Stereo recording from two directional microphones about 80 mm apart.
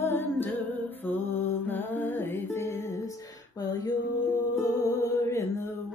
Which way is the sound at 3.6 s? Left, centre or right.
Left.